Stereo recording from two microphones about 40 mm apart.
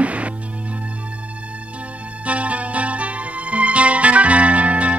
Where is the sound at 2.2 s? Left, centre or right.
Right.